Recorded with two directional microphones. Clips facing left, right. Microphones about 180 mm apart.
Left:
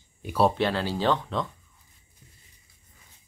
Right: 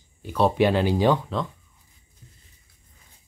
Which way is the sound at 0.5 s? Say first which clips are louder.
Right 6 dB; 15° right (ahead or behind).